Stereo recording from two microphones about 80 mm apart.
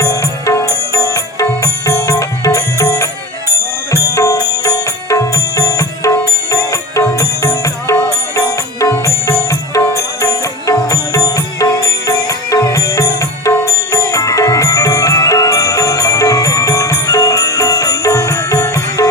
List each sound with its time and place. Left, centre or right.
0.0 s music: left